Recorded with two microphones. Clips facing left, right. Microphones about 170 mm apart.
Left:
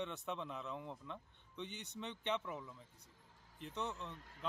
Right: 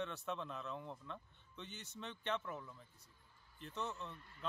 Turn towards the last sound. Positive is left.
turn(degrees=90)